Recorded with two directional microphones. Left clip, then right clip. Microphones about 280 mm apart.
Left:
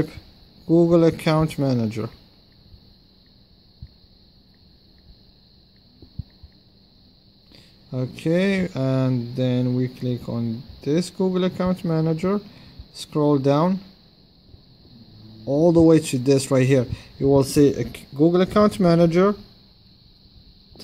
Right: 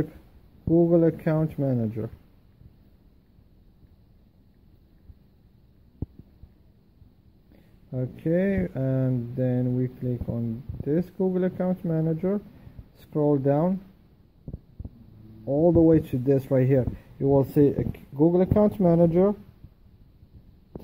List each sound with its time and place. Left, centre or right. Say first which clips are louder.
0.7 s speech: left 4 dB; left
7.9 s speech: left 3 dB; left
15.4 s speech: left 4 dB; left